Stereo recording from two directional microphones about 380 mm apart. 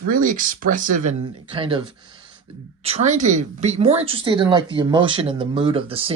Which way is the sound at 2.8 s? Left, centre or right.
Centre.